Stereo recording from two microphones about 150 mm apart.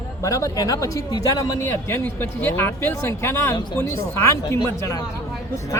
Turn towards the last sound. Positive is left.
turn(degrees=20)  # may be behind; listen again after turning